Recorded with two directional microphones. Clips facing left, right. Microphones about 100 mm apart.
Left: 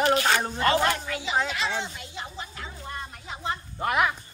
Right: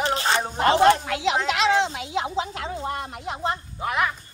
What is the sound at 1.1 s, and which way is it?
Speech, 90° right.